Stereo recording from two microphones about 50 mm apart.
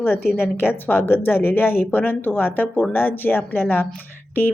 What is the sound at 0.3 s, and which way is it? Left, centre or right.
Speech, left.